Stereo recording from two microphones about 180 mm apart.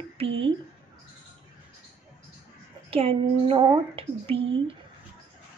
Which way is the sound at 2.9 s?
30° right (ahead or behind).